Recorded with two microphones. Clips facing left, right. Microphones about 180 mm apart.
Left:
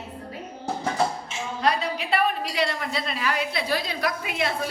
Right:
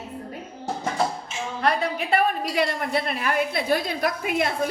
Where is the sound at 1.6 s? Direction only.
55° right (ahead or behind).